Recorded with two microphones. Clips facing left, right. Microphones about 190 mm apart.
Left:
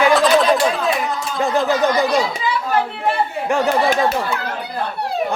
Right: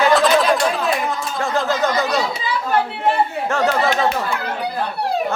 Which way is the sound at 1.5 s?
15° left (ahead or behind).